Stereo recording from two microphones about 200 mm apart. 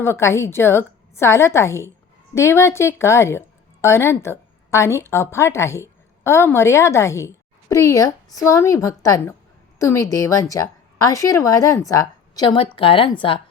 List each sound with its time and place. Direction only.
0.0 s a woman's voice: 15° left (ahead or behind)